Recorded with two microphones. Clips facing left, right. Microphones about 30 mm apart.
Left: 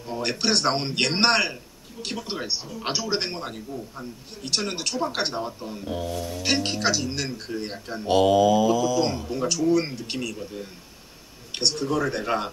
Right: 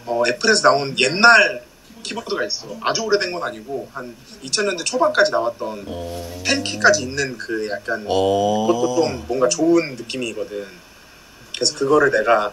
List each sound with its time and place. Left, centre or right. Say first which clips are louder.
0.0 s speech: right 8 dB; centre
3.7 s speech: right 7 dB; right
4.5 s speech: right 6 dB; centre
4.7 s speech: right 6 dB; centre
5.6 s speech: right 8 dB; centre
5.9 s speech: even; centre
10.3 s speech: right 8 dB; right
11.6 s speech: right 5 dB; centre
11.9 s speech: right 10 dB; centre